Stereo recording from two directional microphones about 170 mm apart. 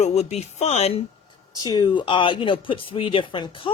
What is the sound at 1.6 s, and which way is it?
Speech, 25° left (ahead or behind).